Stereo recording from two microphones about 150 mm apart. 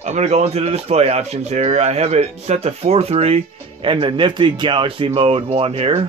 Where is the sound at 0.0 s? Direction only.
50° right (ahead or behind).